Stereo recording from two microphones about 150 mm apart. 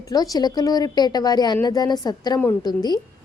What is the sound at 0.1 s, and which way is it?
Speech, 25° left (ahead or behind).